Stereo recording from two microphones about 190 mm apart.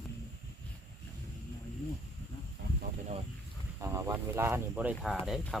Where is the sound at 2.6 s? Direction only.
55° right (ahead or behind).